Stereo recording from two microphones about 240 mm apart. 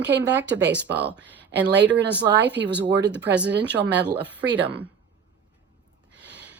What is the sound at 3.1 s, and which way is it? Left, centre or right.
Speech, centre.